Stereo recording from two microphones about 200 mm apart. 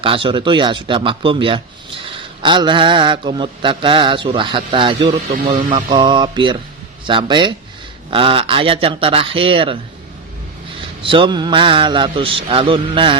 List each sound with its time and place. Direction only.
0.0 s mantra: 25° right (ahead or behind)
11.0 s mantra: 25° right (ahead or behind)